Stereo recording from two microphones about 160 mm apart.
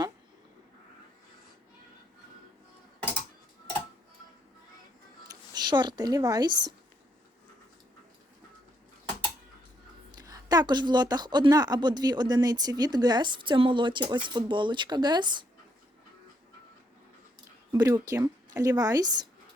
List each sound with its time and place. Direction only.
5.3 s speech: 25° right (ahead or behind)
10.2 s a woman's voice: 25° right (ahead or behind)
17.7 s a woman's voice: 20° right (ahead or behind)